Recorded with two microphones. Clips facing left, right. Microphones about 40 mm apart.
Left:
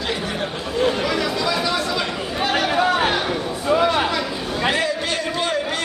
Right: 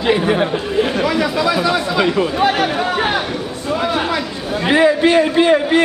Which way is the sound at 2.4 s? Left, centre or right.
Centre.